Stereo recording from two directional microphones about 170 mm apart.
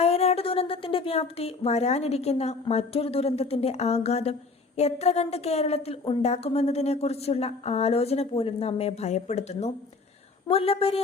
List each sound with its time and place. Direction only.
0.0 s a woman's voice: 35° left (ahead or behind)